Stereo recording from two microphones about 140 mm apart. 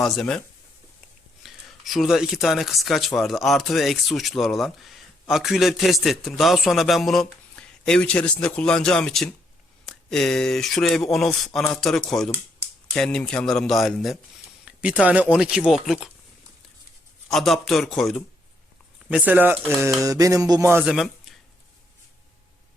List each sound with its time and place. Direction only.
0.0 s speech: 5° left (ahead or behind)
1.5 s speech: centre (ahead or behind)
17.2 s speech: centre (ahead or behind); by 19.7 s 15° right (ahead or behind)
20.0 s music: 25° right (ahead or behind)
20.8 s speech: centre (ahead or behind)